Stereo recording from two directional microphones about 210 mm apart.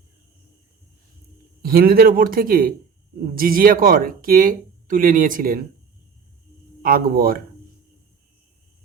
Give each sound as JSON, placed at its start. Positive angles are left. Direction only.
{"t": 1.6, "sound": "speech", "side_deg": -45}
{"t": 6.8, "sound": "speech", "side_deg": -45}